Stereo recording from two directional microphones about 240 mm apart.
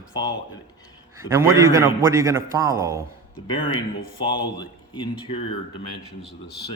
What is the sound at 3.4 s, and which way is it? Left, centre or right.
A man's voice, centre.